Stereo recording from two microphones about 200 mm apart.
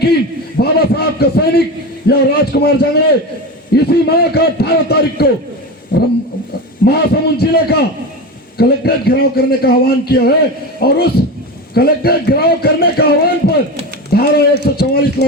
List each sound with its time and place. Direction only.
0.0 s a man's voice: 50° left (ahead or behind)